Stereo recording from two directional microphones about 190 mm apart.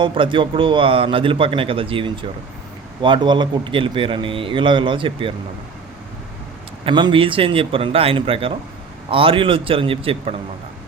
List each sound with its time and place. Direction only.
0.0 s a man's voice: 25° right (ahead or behind)
6.8 s a man's voice: 25° right (ahead or behind)